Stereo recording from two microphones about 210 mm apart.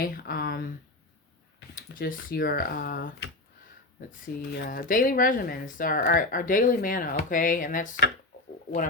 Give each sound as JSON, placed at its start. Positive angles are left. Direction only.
{"t": 0.0, "sound": "speech", "side_deg": 45}
{"t": 1.7, "sound": "speech", "side_deg": 45}
{"t": 4.5, "sound": "speech", "side_deg": 50}